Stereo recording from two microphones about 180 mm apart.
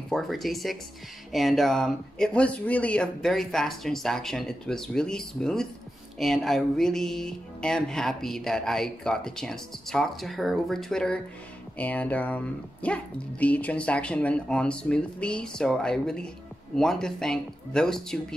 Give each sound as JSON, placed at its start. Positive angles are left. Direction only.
{"t": 0.1, "sound": "music", "side_deg": 0}
{"t": 11.8, "sound": "speech", "side_deg": 10}
{"t": 16.7, "sound": "music", "side_deg": 0}